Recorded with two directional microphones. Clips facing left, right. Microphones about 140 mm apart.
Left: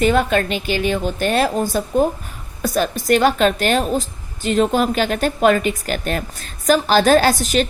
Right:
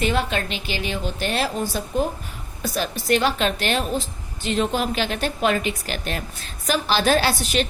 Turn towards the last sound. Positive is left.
turn(degrees=40)  # may be behind; listen again after turning